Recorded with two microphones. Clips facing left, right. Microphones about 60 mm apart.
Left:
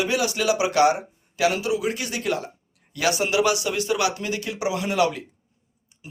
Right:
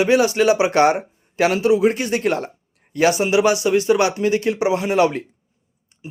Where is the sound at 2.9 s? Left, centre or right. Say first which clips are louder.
Right 6 dB; right.